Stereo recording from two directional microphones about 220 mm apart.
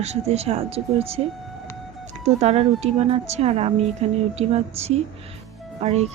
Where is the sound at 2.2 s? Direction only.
30° right (ahead or behind).